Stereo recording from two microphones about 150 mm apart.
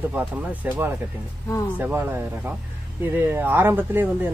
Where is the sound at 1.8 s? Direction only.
15° right (ahead or behind).